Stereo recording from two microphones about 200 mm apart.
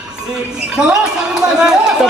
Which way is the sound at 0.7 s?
5° right (ahead or behind).